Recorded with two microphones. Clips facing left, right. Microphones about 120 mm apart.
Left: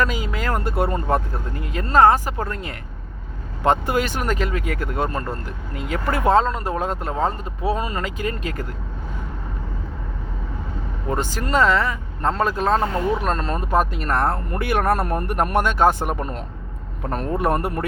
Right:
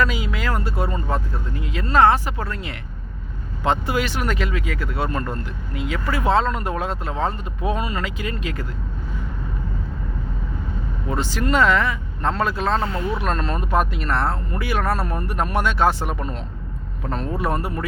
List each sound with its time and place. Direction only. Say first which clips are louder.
0.0 s speech: even; 40° left (ahead or behind)
6.4 s speech: left 1 dB; 35° left (ahead or behind)
11.1 s speech: even; 45° left (ahead or behind)